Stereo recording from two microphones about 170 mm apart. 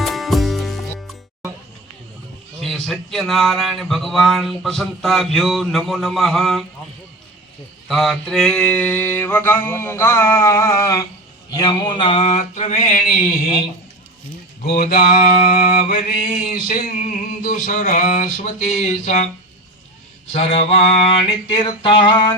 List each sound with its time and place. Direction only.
0.0 s music: centre (ahead or behind)
2.6 s speech: centre (ahead or behind)
7.9 s mantra: centre (ahead or behind); by 11.0 s 20° left (ahead or behind)
11.5 s a sound: 25° left (ahead or behind); by 13.7 s 60° left (ahead or behind)
14.6 s mantra: 55° left (ahead or behind)
20.3 s a sound: 40° left (ahead or behind)